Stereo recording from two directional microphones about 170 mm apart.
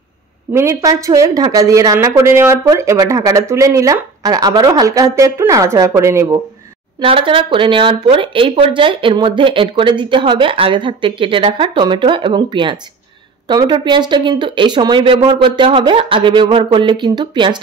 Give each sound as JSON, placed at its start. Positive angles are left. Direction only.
{"t": 0.5, "sound": "a woman's voice", "side_deg": -15}
{"t": 7.0, "sound": "a woman's voice", "side_deg": -30}